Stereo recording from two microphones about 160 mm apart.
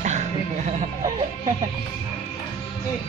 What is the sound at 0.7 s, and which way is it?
Speech, 45° right (ahead or behind).